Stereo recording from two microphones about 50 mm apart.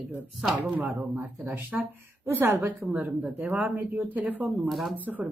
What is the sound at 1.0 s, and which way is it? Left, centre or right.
Speech, right.